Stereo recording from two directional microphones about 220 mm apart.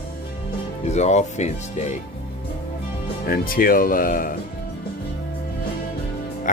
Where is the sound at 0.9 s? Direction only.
30° left (ahead or behind).